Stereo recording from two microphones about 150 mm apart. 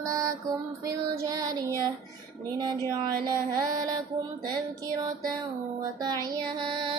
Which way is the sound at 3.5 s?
25° right (ahead or behind).